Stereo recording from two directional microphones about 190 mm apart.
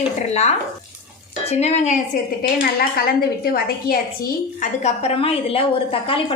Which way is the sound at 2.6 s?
50° left (ahead or behind).